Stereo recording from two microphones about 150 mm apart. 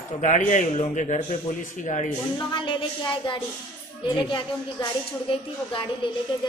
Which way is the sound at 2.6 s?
35° left (ahead or behind).